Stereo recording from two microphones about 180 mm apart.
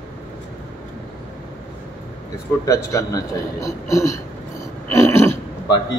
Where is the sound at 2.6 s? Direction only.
20° left (ahead or behind).